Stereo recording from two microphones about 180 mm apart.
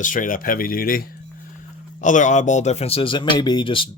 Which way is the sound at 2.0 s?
45° left (ahead or behind).